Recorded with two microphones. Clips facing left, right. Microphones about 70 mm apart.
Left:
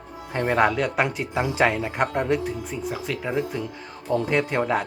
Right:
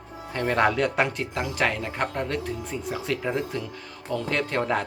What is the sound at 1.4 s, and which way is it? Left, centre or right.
Speech, centre.